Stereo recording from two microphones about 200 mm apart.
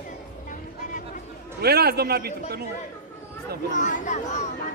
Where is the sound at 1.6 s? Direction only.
50° right (ahead or behind).